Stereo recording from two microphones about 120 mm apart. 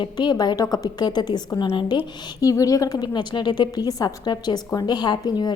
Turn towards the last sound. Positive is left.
turn(degrees=35)  # may be behind; listen again after turning